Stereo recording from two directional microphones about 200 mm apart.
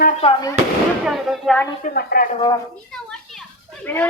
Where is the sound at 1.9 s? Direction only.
50° left (ahead or behind).